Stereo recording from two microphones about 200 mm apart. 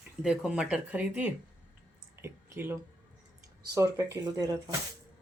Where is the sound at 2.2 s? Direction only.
10° right (ahead or behind).